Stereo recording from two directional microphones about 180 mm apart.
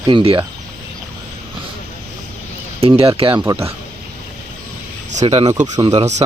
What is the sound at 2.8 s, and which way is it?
Speech, 30° right (ahead or behind).